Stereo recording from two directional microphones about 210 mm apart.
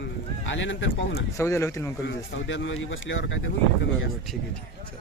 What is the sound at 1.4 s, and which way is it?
Speech, 15° left (ahead or behind).